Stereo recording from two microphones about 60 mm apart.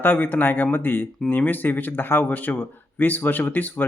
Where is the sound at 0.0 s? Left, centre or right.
Left.